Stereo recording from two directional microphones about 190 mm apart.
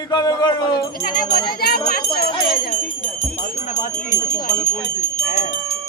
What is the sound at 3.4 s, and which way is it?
Jingle bell, 40° left (ahead or behind).